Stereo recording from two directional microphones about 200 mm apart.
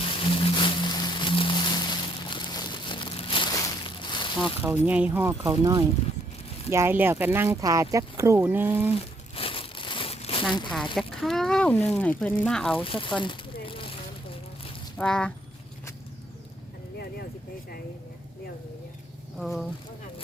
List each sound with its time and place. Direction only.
0.0 s a sound: 25° left (ahead or behind)
4.6 s speech: 10° right (ahead or behind)
9.3 s crumpling: 25° left (ahead or behind)
10.9 s speech: centre (ahead or behind)
12.8 s speech: 25° left (ahead or behind)
14.9 s speech: 5° left (ahead or behind)
19.4 s speech: centre (ahead or behind)